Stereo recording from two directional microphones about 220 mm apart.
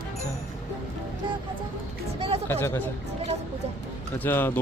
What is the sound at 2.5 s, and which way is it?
Speech, 10° left (ahead or behind).